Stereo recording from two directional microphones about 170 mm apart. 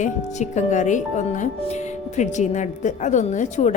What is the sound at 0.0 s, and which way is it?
A woman's voice, 45° left (ahead or behind).